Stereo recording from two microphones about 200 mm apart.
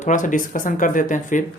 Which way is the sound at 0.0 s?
40° left (ahead or behind).